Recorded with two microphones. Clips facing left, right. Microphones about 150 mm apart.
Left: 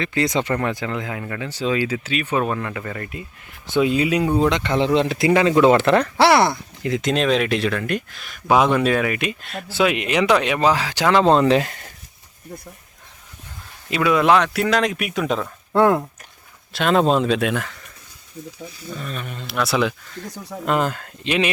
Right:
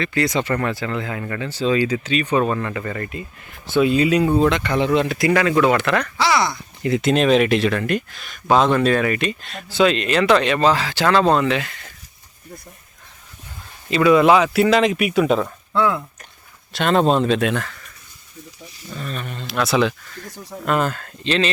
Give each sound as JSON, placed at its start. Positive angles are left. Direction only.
{"t": 0.0, "sound": "speech", "side_deg": 20}
{"t": 3.7, "sound": "speech", "side_deg": 15}
{"t": 6.1, "sound": "speech", "side_deg": 60}
{"t": 6.8, "sound": "speech", "side_deg": -5}
{"t": 13.9, "sound": "speech", "side_deg": 0}
{"t": 15.7, "sound": "speech", "side_deg": 50}
{"t": 16.7, "sound": "speech", "side_deg": 0}
{"t": 18.9, "sound": "speech", "side_deg": 5}
{"t": 20.7, "sound": "speech", "side_deg": 15}